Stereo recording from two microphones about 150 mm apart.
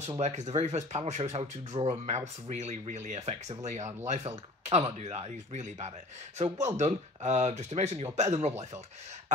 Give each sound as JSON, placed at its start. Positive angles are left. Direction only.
{"t": 0.2, "sound": "speech", "side_deg": -50}